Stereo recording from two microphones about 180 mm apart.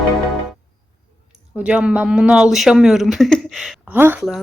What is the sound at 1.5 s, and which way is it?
Speech, 5° right (ahead or behind).